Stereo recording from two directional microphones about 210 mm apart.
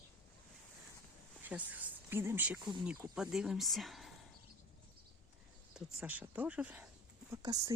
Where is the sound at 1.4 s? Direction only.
5° right (ahead or behind).